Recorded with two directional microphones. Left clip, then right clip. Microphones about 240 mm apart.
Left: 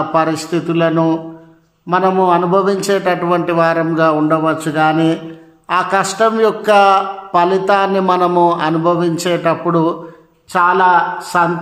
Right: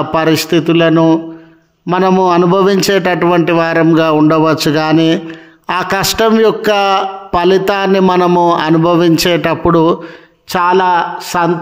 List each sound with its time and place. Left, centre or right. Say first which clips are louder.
0.1 s a man's voice: right 7 dB; right